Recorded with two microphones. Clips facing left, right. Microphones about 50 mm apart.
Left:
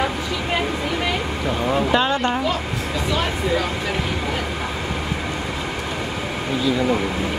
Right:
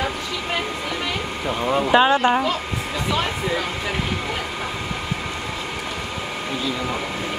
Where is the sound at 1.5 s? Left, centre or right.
Centre.